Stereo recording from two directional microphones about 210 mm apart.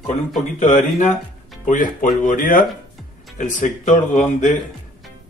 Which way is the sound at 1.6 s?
40° left (ahead or behind).